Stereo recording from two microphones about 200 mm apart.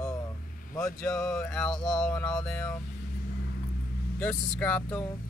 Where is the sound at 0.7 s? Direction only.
10° left (ahead or behind).